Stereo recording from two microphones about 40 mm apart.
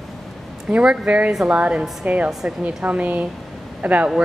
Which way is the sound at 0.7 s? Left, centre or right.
Centre.